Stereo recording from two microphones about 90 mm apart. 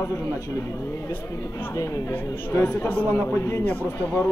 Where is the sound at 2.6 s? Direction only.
20° left (ahead or behind).